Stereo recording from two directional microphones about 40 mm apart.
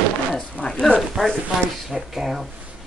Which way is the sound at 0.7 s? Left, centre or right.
Left.